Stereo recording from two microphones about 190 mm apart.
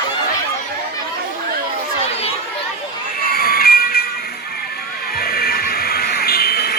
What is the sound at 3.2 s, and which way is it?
Music, 50° left (ahead or behind).